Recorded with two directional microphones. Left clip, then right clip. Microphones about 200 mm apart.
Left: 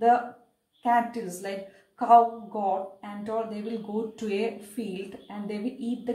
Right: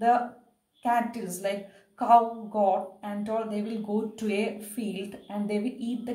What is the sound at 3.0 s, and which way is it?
A woman's voice, 40° right (ahead or behind).